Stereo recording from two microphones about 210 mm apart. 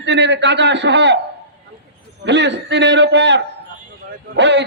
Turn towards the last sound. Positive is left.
turn(degrees=-55)  # may be behind; listen again after turning